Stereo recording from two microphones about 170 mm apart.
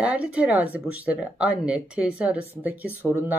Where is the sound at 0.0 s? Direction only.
10° right (ahead or behind).